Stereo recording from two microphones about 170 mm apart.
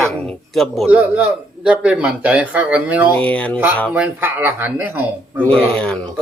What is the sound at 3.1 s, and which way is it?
Speech, 10° left (ahead or behind).